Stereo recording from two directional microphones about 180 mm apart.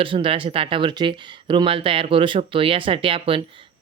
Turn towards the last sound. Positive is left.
turn(degrees=-30)  # may be behind; listen again after turning